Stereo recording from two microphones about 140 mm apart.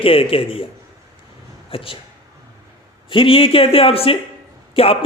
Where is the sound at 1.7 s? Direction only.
40° left (ahead or behind).